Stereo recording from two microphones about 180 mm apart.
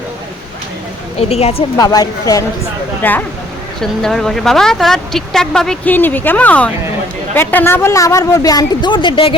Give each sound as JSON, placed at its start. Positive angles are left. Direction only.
{"t": 1.2, "sound": "speech", "side_deg": 35}
{"t": 1.7, "sound": "a woman's voice", "side_deg": 20}
{"t": 3.0, "sound": "a woman's voice", "side_deg": 10}